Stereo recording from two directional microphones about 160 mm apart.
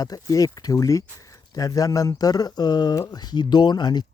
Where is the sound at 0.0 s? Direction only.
20° left (ahead or behind).